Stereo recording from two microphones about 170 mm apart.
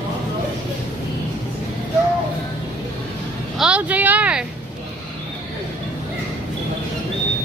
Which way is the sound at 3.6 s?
5° right (ahead or behind).